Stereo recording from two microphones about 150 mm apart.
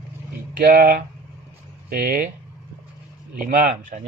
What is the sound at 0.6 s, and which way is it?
Speech, 80° right.